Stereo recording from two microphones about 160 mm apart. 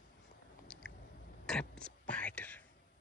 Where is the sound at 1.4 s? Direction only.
5° left (ahead or behind).